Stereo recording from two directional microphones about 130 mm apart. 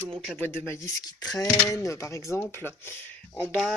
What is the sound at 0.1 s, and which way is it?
Speech, centre (ahead or behind).